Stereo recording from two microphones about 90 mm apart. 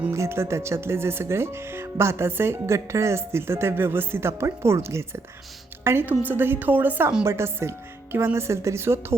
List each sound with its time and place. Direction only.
0.1 s speech: 30° right (ahead or behind)